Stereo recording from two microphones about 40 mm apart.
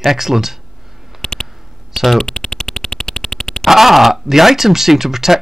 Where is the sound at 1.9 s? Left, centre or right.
Centre.